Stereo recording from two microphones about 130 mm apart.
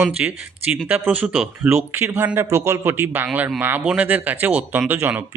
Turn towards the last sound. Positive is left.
turn(degrees=-15)  # may be behind; listen again after turning